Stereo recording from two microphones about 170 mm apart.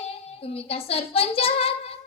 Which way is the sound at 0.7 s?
35° left (ahead or behind).